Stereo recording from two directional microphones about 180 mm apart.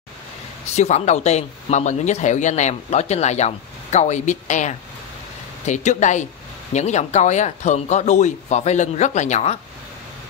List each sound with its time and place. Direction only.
0.7 s speech: 40° left (ahead or behind)